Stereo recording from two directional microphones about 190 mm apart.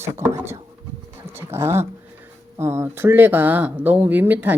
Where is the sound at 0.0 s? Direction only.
15° right (ahead or behind).